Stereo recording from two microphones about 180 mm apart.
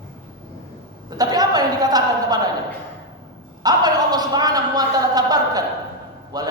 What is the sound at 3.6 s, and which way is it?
A man's voice, 20° right (ahead or behind).